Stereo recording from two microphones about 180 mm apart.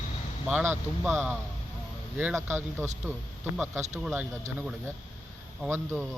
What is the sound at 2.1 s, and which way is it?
Speech, 10° right (ahead or behind).